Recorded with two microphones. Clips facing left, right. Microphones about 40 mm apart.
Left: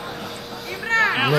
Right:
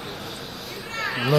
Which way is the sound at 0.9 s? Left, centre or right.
Left.